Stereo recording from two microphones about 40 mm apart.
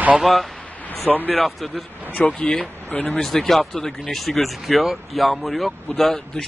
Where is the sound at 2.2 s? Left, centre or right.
Left.